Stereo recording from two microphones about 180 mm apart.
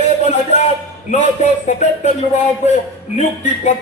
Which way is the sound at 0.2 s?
40° left (ahead or behind).